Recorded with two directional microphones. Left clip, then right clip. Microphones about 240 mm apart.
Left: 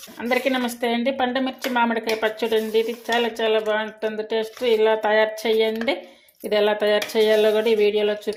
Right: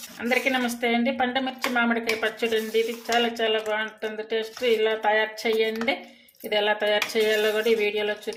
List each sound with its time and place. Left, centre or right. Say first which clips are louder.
0.7 s speech: left 2 dB; left